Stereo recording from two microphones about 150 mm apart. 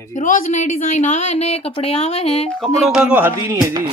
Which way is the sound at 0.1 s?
55° left (ahead or behind).